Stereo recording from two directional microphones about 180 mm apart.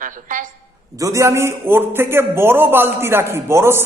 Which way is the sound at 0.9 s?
20° right (ahead or behind).